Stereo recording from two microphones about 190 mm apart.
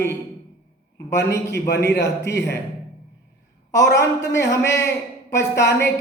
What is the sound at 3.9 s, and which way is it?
Music, 15° left (ahead or behind).